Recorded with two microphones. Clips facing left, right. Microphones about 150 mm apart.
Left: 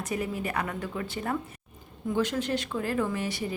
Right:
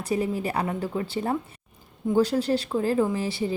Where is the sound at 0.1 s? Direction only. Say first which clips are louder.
Right 6 dB; 30° right (ahead or behind).